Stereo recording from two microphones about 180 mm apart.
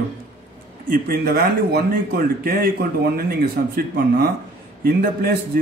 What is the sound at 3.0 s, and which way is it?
Speech, 60° right (ahead or behind).